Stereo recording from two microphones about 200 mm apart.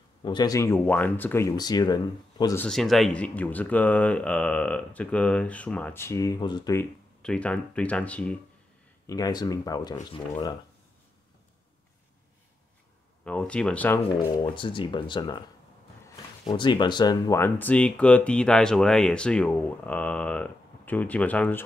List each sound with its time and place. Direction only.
0.2 s speech: 20° left (ahead or behind)
2.6 s speech: centre (ahead or behind)
9.0 s speech: 15° left (ahead or behind)
13.2 s speech: 5° left (ahead or behind)
14.5 s speech: 25° left (ahead or behind)
16.4 s speech: 25° left (ahead or behind); by 21.6 s 10° left (ahead or behind)